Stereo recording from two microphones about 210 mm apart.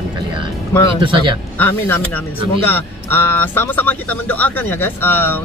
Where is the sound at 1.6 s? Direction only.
10° left (ahead or behind).